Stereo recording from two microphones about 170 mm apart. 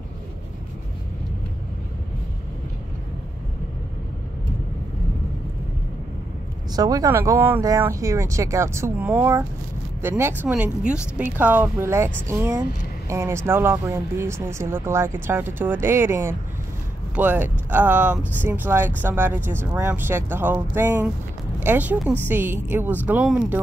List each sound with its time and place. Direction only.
6.7 s speech: 20° right (ahead or behind); by 23.6 s 5° right (ahead or behind)